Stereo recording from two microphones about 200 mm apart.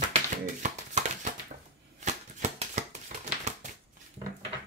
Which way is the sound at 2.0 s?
35° right (ahead or behind).